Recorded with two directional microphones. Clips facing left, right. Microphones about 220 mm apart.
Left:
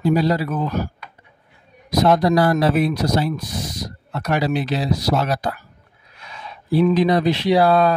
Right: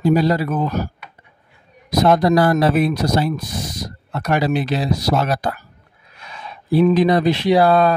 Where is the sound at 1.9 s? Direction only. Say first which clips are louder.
Right 1 dB; 50° right (ahead or behind).